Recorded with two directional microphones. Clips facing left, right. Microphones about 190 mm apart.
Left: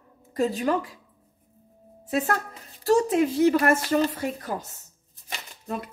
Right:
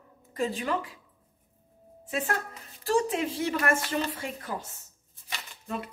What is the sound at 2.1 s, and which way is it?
A woman's voice, 40° left (ahead or behind).